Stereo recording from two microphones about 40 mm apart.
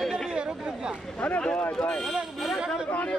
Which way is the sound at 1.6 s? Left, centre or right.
Left.